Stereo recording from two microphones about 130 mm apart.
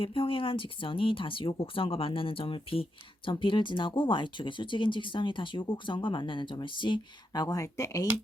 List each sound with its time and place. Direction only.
0.0 s speech: 45° left (ahead or behind)
7.4 s speech: 25° left (ahead or behind)